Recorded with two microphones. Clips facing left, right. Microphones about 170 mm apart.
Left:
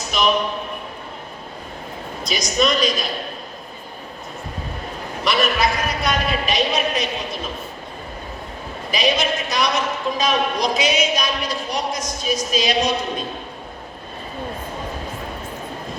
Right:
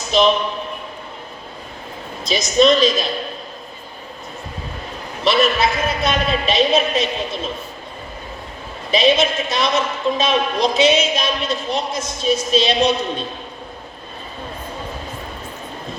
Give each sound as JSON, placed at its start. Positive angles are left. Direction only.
{"t": 0.1, "sound": "a man's voice", "side_deg": -25}
{"t": 2.2, "sound": "a woman's voice", "side_deg": -25}
{"t": 5.2, "sound": "a woman's voice", "side_deg": -25}
{"t": 8.9, "sound": "a woman's voice", "side_deg": -25}